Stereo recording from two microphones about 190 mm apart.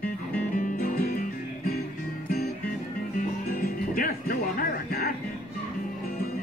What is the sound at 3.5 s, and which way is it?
Music, 50° left (ahead or behind).